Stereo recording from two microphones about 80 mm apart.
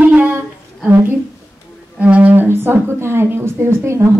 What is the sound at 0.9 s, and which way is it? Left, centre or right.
A woman's voice, right.